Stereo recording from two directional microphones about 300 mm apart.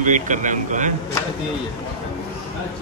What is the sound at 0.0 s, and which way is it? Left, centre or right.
Speech, right.